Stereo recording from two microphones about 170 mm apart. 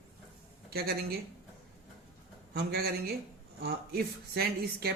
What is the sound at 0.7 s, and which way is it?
Speech, 65° right (ahead or behind).